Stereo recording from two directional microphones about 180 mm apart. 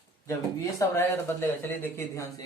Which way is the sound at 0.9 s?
15° left (ahead or behind).